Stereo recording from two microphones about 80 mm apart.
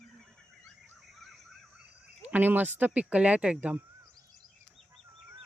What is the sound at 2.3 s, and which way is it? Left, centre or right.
Speech, right.